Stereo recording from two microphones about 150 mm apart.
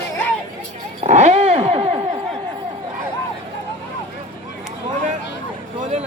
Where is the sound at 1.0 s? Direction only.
50° right (ahead or behind).